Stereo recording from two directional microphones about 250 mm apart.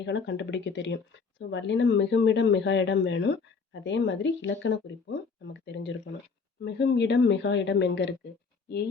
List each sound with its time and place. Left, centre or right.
0.0 s speech: left